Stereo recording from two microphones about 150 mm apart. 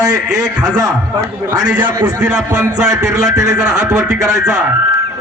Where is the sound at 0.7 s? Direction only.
25° right (ahead or behind).